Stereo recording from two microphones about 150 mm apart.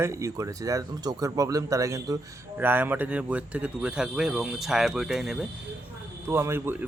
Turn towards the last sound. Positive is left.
turn(degrees=-15)  # may be behind; listen again after turning